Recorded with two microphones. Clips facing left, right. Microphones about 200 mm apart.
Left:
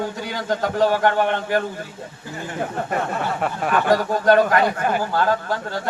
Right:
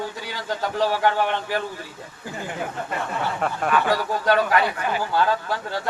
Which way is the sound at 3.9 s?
45° left (ahead or behind).